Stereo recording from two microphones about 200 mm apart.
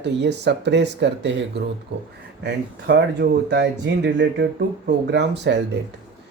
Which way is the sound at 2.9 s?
60° right (ahead or behind).